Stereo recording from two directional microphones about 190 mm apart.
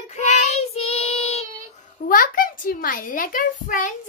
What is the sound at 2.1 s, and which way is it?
A woman's voice, 45° left (ahead or behind).